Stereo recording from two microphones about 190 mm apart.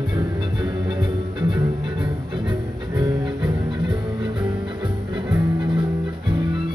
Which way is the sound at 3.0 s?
25° right (ahead or behind).